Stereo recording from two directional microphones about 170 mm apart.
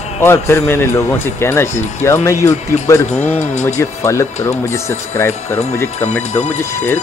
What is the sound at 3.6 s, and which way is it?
Speech, 15° left (ahead or behind).